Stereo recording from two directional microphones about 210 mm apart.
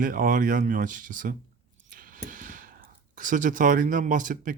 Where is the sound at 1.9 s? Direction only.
40° right (ahead or behind).